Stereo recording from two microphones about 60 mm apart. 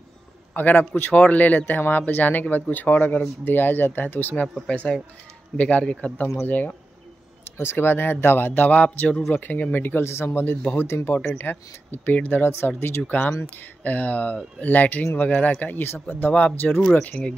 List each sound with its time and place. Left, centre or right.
0.6 s speech: left
4.6 s speech: centre
7.5 s speech: left
10.0 s speech: left
13.0 s speech: left